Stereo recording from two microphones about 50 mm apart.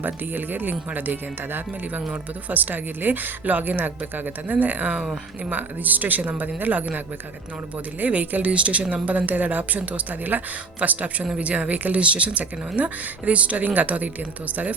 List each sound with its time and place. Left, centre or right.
0.0 s a woman's voice: right
8.0 s a woman's voice: right